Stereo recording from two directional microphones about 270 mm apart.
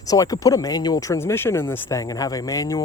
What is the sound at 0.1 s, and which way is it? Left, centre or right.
Speech, centre.